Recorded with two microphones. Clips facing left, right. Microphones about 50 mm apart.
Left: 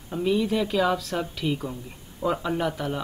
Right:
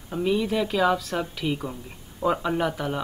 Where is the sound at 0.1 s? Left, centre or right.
Centre.